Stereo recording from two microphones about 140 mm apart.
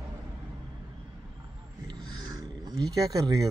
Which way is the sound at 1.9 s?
30° right (ahead or behind).